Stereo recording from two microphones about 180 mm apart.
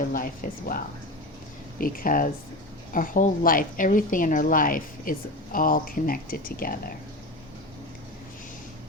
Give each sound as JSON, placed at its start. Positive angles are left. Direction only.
{"t": 0.1, "sound": "a woman's voice", "side_deg": 50}
{"t": 1.8, "sound": "a woman's voice", "side_deg": 50}